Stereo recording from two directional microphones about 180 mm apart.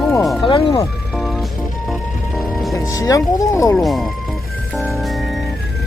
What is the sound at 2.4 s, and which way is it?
Music, centre (ahead or behind).